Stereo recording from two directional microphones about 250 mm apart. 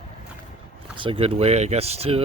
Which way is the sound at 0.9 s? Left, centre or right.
Right.